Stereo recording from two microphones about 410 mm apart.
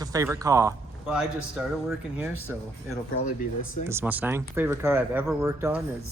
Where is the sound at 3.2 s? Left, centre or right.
Centre.